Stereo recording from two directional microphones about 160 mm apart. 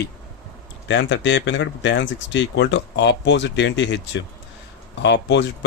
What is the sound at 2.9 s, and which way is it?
Speech, 90° left.